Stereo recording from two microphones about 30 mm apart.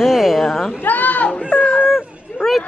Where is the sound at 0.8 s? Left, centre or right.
Left.